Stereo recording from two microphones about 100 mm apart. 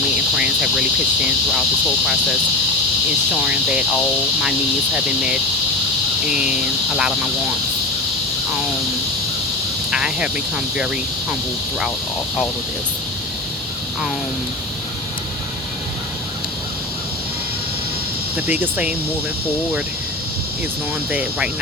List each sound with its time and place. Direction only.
0.3 s speech: 10° right (ahead or behind)
3.4 s speech: 10° right (ahead or behind)
4.9 s speech: 10° right (ahead or behind)
9.9 s speech: 10° right (ahead or behind)
18.3 s speech: 15° right (ahead or behind)
21.1 s speech: 15° right (ahead or behind)